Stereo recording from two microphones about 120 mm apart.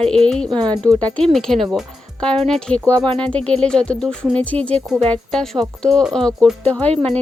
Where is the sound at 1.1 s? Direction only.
5° left (ahead or behind).